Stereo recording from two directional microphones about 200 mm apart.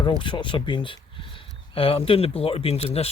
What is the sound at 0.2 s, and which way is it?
Speech, 25° left (ahead or behind).